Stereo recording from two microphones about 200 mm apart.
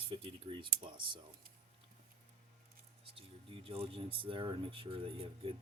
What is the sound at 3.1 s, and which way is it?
Speech, 30° right (ahead or behind).